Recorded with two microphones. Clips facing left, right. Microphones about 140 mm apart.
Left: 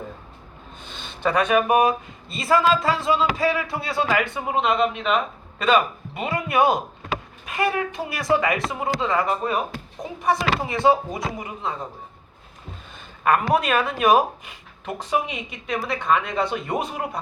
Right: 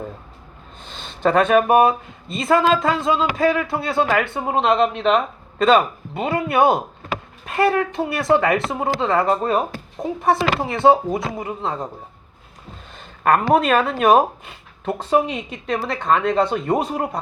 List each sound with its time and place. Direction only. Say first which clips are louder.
0.9 s a woman's voice: right 5 dB; 30° right (ahead or behind)
4.4 s a woman's voice: right 4 dB; 35° right (ahead or behind)
13.3 s speech: right 4 dB; 35° right (ahead or behind)